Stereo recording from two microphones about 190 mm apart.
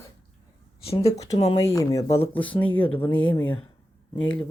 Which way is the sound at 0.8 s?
30° left (ahead or behind).